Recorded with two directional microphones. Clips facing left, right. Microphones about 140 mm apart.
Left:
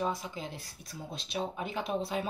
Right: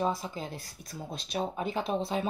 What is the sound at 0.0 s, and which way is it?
Speech, 35° right (ahead or behind).